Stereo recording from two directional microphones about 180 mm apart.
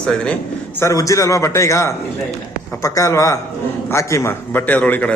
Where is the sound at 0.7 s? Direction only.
15° left (ahead or behind).